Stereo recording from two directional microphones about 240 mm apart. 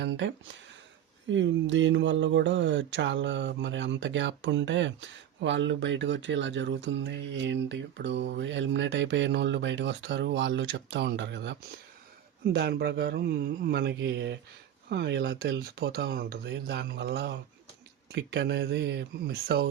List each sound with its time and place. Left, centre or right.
0.0 s speech: right
12.5 s speech: right